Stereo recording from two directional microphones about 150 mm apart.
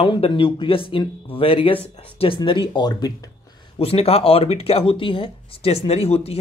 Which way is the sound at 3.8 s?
40° left (ahead or behind).